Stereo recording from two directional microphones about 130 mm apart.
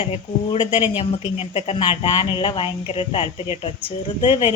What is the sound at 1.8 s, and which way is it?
Speech, 35° left (ahead or behind).